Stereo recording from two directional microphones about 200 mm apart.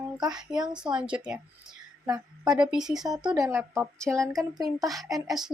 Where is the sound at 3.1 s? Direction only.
20° right (ahead or behind).